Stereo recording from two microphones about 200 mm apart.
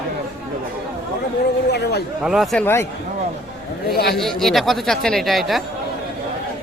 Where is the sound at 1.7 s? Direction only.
55° left (ahead or behind).